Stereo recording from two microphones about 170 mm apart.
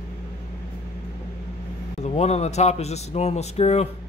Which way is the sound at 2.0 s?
40° left (ahead or behind).